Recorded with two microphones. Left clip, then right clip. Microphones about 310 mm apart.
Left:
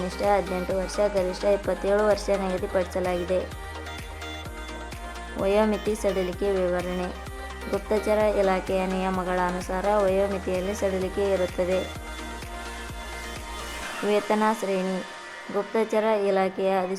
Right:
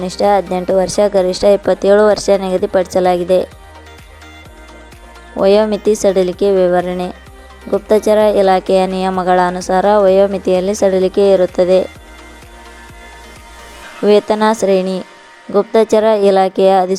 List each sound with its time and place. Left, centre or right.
0.1 s speech: right
5.4 s speech: right
14.1 s speech: right